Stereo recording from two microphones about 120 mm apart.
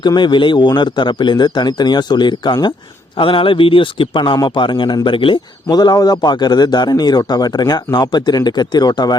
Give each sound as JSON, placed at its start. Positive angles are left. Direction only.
{"t": 0.0, "sound": "a man's voice", "side_deg": 40}